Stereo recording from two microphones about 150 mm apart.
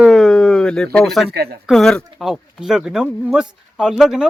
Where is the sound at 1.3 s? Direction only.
90° right.